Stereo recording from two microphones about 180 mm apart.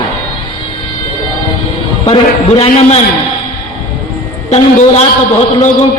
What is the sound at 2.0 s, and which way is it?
A man's voice, 30° left (ahead or behind).